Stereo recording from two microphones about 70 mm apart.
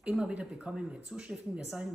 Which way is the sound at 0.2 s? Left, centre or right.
Centre.